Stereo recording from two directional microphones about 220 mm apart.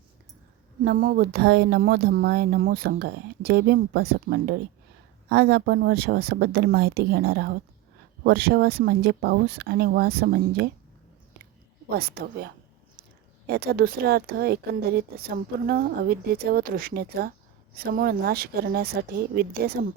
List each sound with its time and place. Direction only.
0.9 s speech: 40° right (ahead or behind)
11.9 s speech: 45° right (ahead or behind)
13.5 s speech: 45° right (ahead or behind)